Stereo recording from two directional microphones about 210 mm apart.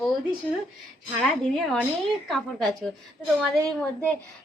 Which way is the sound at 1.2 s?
Centre (ahead or behind).